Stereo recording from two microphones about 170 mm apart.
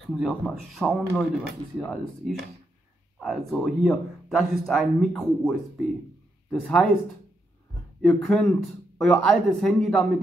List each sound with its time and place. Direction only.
0.2 s speech: centre (ahead or behind)
8.0 s speech: 5° left (ahead or behind)